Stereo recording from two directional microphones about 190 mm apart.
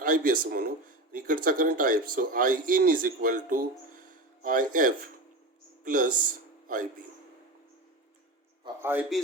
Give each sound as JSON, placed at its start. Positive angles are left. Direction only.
{"t": 0.0, "sound": "a man's voice", "side_deg": -50}
{"t": 8.8, "sound": "a man's voice", "side_deg": -10}